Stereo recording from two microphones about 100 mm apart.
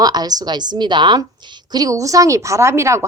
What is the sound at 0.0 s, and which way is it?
A woman's voice, 40° right (ahead or behind).